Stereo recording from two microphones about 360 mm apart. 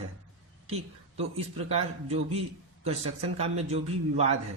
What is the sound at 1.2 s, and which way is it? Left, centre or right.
A man's voice, centre.